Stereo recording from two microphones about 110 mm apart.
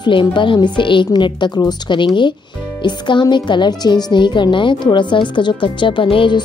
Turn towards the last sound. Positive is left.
turn(degrees=50)  # may be behind; listen again after turning